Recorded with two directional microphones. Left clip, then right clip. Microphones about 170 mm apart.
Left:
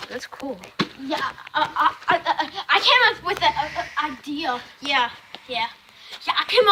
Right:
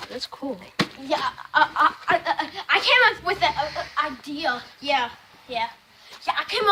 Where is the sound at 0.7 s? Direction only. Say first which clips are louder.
Right 1 dB; 65° right (ahead or behind).